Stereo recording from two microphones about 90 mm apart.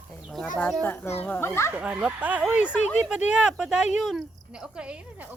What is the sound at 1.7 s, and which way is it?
Speech, 15° right (ahead or behind).